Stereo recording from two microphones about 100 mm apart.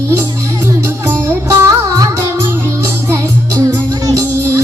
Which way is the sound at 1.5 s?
35° right (ahead or behind).